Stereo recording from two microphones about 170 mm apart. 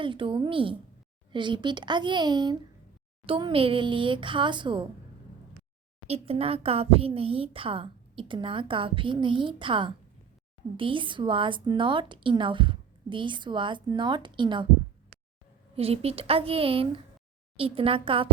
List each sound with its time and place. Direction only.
0.0 s a woman's voice: 30° right (ahead or behind)
6.1 s a woman's voice: 35° right (ahead or behind)
15.7 s speech: 35° right (ahead or behind)